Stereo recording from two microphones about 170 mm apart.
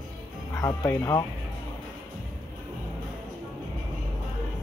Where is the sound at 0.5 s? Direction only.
15° left (ahead or behind).